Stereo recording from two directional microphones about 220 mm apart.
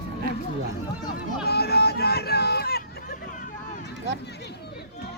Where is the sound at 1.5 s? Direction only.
45° left (ahead or behind).